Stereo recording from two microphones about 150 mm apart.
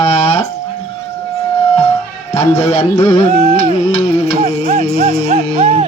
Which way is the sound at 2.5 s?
45° left (ahead or behind).